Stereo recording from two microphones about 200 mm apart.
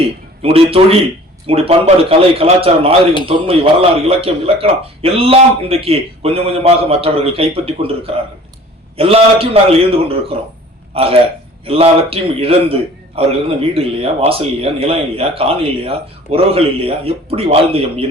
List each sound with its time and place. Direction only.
0.4 s a man's voice: 30° right (ahead or behind)